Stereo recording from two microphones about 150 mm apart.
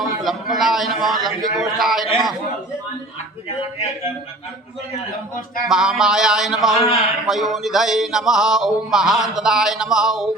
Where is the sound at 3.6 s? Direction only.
40° left (ahead or behind).